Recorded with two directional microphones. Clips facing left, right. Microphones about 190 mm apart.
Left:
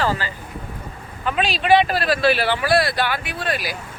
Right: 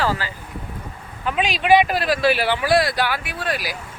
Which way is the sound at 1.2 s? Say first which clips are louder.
Even; 15° right (ahead or behind).